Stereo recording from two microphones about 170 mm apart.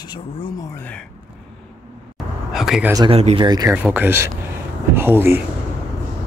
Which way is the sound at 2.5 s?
Centre (ahead or behind).